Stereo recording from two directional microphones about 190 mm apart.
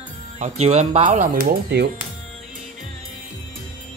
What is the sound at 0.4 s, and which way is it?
Speech, 35° right (ahead or behind).